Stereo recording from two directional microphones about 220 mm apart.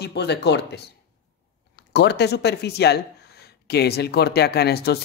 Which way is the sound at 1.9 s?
50° left (ahead or behind).